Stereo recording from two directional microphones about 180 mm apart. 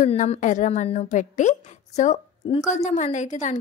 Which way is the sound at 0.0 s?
40° left (ahead or behind).